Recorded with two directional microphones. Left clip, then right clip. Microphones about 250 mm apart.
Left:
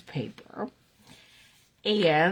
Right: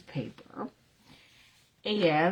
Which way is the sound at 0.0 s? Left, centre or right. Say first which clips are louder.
Left 3 dB; left.